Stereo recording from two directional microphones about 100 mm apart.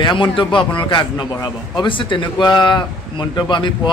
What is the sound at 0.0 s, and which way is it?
A man's voice, 55° left (ahead or behind).